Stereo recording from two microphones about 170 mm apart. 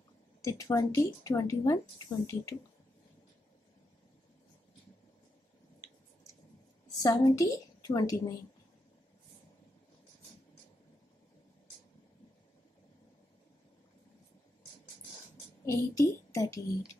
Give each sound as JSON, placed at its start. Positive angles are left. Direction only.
{"t": 0.4, "sound": "a woman's voice", "side_deg": 20}
{"t": 7.0, "sound": "a woman's voice", "side_deg": 20}
{"t": 15.6, "sound": "a woman's voice", "side_deg": 20}